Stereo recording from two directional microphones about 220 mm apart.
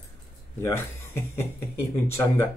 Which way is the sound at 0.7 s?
10° left (ahead or behind).